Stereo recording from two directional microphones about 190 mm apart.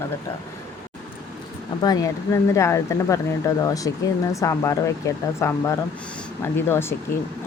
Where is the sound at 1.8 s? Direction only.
20° left (ahead or behind).